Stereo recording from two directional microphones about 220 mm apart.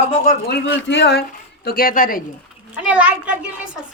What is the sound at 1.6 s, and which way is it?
Speech, 40° left (ahead or behind).